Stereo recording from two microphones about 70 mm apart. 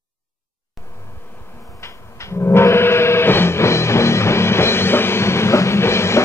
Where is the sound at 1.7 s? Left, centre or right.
Left.